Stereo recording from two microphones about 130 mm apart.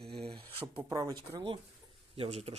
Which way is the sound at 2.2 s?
50° right (ahead or behind).